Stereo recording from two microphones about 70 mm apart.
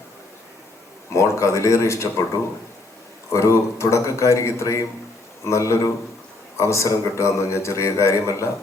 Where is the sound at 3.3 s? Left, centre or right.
Left.